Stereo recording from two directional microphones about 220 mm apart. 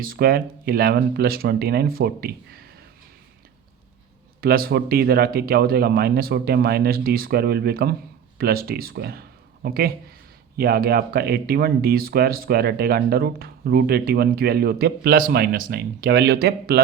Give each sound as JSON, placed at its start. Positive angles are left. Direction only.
{"t": 0.0, "sound": "speech", "side_deg": -40}
{"t": 4.4, "sound": "speech", "side_deg": -45}